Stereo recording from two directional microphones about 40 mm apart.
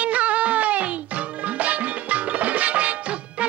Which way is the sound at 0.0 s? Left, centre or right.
Right.